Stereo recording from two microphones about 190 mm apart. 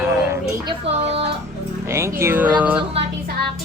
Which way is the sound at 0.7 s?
35° right (ahead or behind).